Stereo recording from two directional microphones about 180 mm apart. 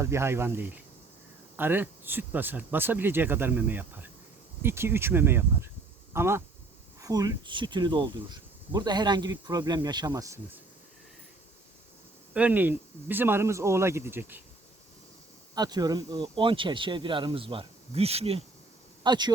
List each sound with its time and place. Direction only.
0.0 s speech: 15° right (ahead or behind)
12.3 s speech: 10° right (ahead or behind)
15.5 s speech: 20° right (ahead or behind)
19.0 s speech: 25° right (ahead or behind)